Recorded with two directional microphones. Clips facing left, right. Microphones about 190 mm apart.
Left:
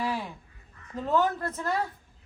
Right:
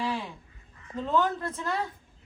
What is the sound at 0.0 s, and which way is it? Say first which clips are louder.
Goose: left 1 dB; 10° left (ahead or behind).